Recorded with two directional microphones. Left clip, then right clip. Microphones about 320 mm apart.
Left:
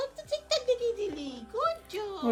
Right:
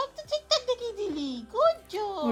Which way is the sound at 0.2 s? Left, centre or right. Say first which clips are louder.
Right 4 dB; centre.